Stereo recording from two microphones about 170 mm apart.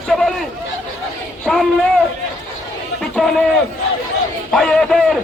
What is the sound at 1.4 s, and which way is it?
Speech, centre (ahead or behind).